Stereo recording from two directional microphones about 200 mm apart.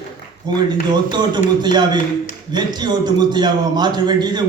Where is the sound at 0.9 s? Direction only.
20° right (ahead or behind).